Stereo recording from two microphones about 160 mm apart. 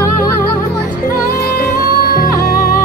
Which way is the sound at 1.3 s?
75° left (ahead or behind).